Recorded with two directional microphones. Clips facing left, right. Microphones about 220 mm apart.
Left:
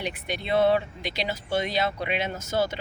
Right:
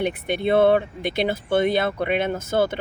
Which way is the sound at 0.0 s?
55° right (ahead or behind).